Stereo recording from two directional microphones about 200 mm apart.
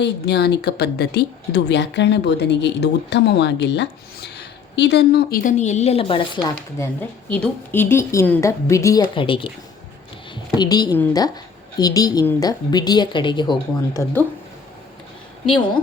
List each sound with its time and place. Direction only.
0.0 s a woman's voice: 55° left (ahead or behind); by 6.5 s 25° left (ahead or behind)
6.7 s a woman's voice: 10° left (ahead or behind)